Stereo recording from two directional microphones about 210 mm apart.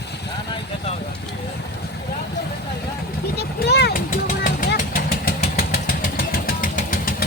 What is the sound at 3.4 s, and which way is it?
Vehicle, 50° left (ahead or behind).